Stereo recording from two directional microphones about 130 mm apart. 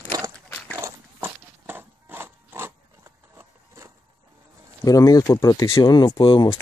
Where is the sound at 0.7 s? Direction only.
20° right (ahead or behind).